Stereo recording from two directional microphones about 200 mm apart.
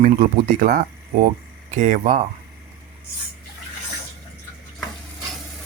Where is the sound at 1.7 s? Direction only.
40° right (ahead or behind).